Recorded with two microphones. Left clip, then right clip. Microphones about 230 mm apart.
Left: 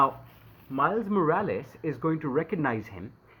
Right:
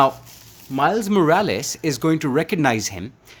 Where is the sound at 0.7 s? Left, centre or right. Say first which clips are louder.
Right 7 dB; right.